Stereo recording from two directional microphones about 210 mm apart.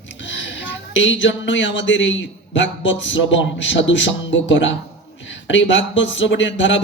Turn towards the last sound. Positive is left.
turn(degrees=60)  # may be behind; listen again after turning